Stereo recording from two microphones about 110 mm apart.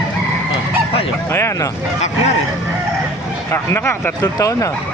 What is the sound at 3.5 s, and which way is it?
Speech, 20° left (ahead or behind).